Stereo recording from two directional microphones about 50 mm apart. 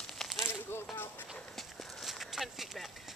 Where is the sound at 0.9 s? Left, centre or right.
Left.